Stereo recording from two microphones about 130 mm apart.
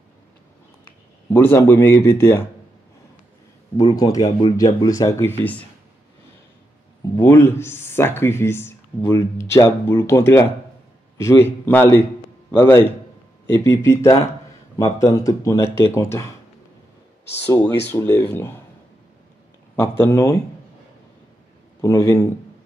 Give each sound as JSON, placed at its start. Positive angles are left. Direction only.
{"t": 1.3, "sound": "speech", "side_deg": 20}
{"t": 3.7, "sound": "speech", "side_deg": 30}
{"t": 5.4, "sound": "speech", "side_deg": 10}
{"t": 7.2, "sound": "a man's voice", "side_deg": 20}
{"t": 17.9, "sound": "speech", "side_deg": 20}
{"t": 19.7, "sound": "speech", "side_deg": 20}
{"t": 21.8, "sound": "speech", "side_deg": 25}